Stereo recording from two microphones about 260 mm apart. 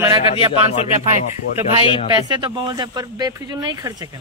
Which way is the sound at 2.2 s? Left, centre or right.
Centre.